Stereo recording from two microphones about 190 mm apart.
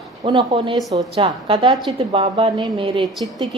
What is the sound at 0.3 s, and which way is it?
A woman's voice, 25° right (ahead or behind).